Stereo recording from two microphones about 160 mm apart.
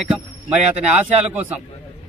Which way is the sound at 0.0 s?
5° right (ahead or behind).